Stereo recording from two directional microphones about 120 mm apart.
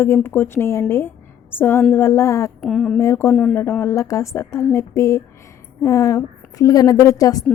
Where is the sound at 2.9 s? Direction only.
20° left (ahead or behind).